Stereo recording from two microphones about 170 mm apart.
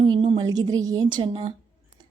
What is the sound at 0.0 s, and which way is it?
A woman's voice, 30° right (ahead or behind).